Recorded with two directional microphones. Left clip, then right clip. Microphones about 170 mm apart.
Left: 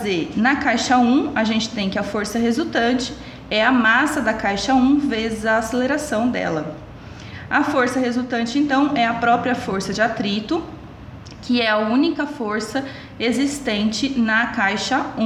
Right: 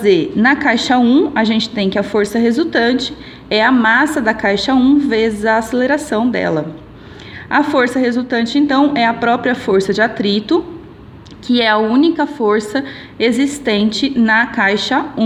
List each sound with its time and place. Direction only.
0.0 s a woman's voice: 50° right (ahead or behind)